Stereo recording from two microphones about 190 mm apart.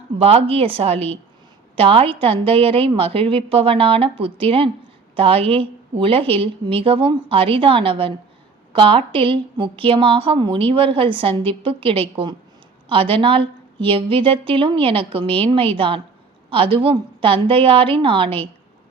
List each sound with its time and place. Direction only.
0.2 s a woman's voice: 30° right (ahead or behind)